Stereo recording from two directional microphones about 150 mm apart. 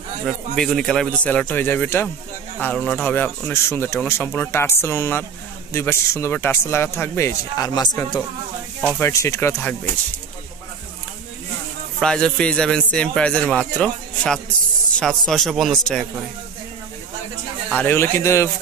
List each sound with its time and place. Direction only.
0.6 s a man's voice: 5° left (ahead or behind); by 8.2 s 25° left (ahead or behind)
8.8 s speech: 10° left (ahead or behind)
9.1 s a man's voice: 20° left (ahead or behind)
12.0 s a man's voice: 5° left (ahead or behind)
17.6 s speech: 10° left (ahead or behind)